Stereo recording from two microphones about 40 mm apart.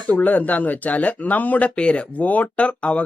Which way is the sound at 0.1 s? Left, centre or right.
Left.